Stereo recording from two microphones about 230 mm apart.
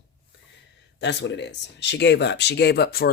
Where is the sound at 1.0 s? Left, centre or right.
Left.